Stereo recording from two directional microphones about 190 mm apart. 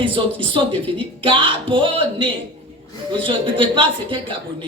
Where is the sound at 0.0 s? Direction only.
25° right (ahead or behind).